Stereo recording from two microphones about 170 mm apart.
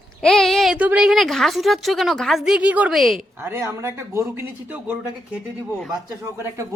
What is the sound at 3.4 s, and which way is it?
Speech, 15° right (ahead or behind).